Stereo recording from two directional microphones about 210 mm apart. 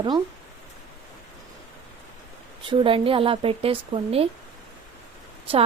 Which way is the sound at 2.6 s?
25° right (ahead or behind).